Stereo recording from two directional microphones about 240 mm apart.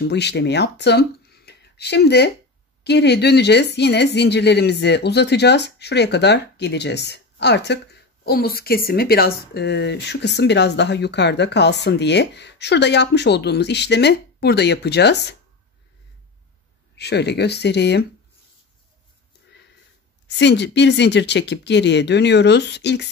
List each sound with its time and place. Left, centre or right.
0.0 s speech: left
16.9 s speech: left
20.2 s speech: left